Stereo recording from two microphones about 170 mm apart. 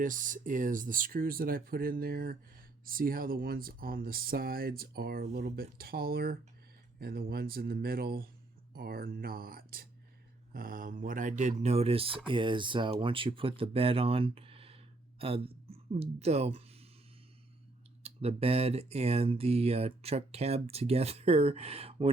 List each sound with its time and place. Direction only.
0.0 s speech: 50° right (ahead or behind)
18.0 s speech: 35° right (ahead or behind)